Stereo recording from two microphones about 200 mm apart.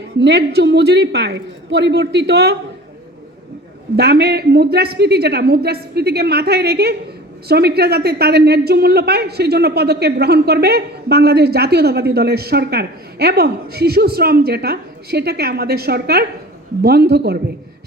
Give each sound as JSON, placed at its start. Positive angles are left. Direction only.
{"t": 0.2, "sound": "a woman's voice", "side_deg": -55}
{"t": 3.9, "sound": "a woman's voice", "side_deg": -55}